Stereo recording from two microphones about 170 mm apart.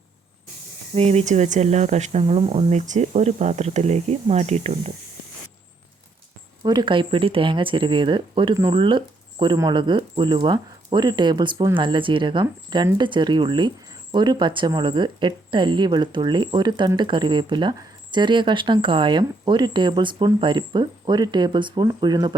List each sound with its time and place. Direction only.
0.9 s speech: 40° right (ahead or behind)
6.6 s speech: 25° right (ahead or behind)